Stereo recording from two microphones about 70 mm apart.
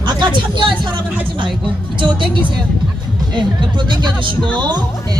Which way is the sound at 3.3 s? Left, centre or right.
Right.